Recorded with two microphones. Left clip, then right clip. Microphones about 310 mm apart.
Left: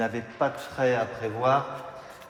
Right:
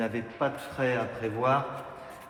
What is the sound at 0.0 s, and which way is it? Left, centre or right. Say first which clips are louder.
A man's voice: left 3 dB; left.